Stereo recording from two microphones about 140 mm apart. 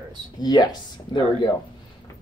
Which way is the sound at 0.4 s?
30° left (ahead or behind).